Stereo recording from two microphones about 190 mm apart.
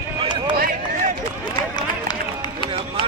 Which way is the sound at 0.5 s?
50° right (ahead or behind).